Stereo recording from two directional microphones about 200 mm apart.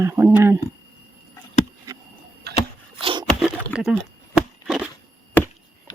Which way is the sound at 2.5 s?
55° right (ahead or behind).